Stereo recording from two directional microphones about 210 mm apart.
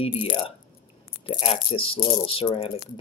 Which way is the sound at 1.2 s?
25° left (ahead or behind).